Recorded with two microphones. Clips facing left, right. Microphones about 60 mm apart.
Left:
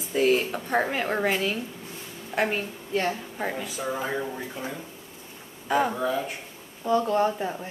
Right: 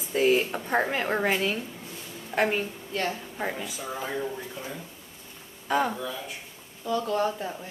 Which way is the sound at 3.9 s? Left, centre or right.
Centre.